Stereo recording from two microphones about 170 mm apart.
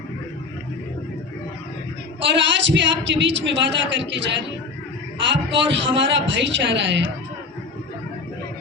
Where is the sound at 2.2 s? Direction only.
90° right.